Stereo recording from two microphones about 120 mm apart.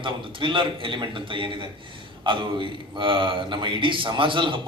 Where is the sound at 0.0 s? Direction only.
45° right (ahead or behind).